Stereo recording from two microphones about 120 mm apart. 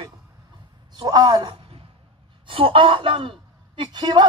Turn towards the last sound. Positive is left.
turn(degrees=-40)  # may be behind; listen again after turning